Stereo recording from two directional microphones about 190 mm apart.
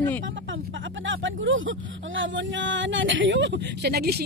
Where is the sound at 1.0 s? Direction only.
80° right.